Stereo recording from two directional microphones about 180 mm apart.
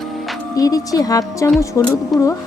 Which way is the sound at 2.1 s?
Centre (ahead or behind).